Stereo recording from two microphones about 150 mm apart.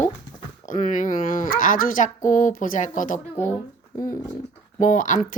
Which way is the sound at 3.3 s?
15° left (ahead or behind).